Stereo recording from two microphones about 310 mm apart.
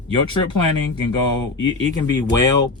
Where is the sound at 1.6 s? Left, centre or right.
Centre.